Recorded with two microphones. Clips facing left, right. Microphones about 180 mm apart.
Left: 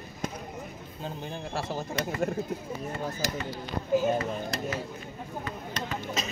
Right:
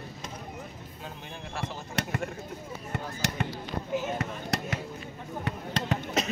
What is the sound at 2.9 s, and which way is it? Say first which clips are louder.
Speech: right 2 dB; 70° right (ahead or behind).